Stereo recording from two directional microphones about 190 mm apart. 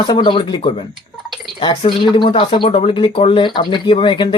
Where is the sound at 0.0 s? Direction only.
25° left (ahead or behind).